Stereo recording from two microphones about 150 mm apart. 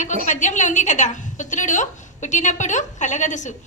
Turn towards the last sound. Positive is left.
turn(degrees=55)  # may be behind; listen again after turning